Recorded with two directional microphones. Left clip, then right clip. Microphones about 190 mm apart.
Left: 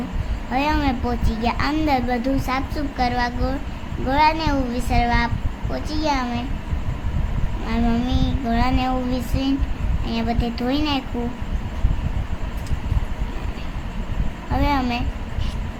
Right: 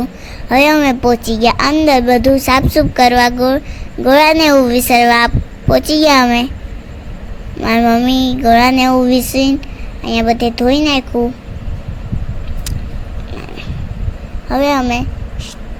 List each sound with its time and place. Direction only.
0.5 s child singing: 40° right (ahead or behind)
1.9 s a woman's voice: 40° right (ahead or behind)
7.6 s child singing: 40° right (ahead or behind)
14.5 s child singing: 35° right (ahead or behind)